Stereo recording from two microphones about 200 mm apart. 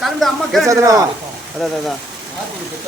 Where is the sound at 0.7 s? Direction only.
15° right (ahead or behind).